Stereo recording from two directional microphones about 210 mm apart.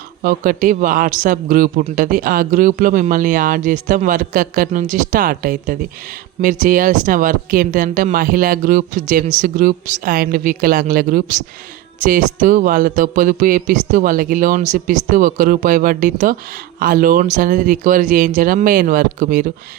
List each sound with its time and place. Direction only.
0.2 s a man's voice: 40° right (ahead or behind)